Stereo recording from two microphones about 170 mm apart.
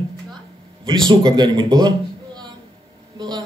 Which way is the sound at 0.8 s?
25° right (ahead or behind).